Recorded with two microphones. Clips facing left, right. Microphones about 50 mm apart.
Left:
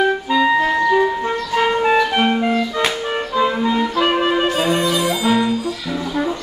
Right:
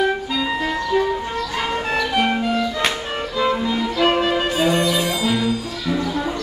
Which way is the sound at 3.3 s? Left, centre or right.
Centre.